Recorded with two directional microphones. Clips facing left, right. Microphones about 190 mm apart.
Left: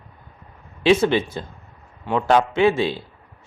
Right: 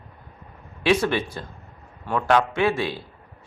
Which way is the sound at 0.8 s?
25° left (ahead or behind).